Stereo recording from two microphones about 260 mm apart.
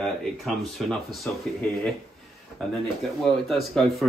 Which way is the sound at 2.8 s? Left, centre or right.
Centre.